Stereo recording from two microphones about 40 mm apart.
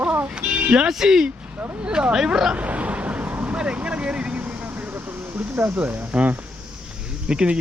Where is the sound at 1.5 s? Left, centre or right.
Right.